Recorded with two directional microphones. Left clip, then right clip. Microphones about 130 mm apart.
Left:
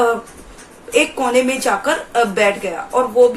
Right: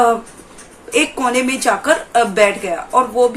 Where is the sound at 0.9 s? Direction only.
25° right (ahead or behind).